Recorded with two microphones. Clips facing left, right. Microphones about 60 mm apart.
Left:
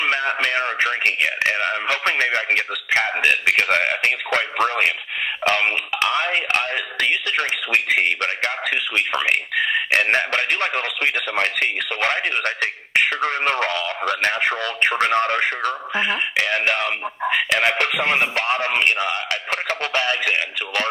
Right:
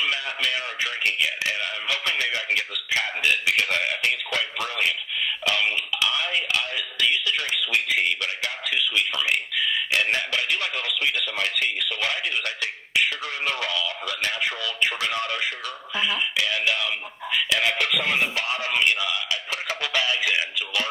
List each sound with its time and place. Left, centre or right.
0.0 s speech: left